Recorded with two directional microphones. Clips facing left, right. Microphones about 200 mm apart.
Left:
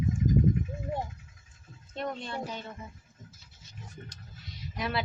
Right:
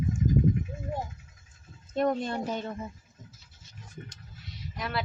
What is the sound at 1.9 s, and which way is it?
Speech, 45° right (ahead or behind).